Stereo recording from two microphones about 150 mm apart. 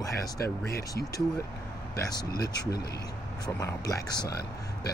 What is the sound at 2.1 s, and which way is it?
Speech, 25° left (ahead or behind).